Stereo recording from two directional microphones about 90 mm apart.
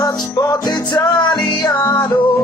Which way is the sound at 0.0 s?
40° left (ahead or behind).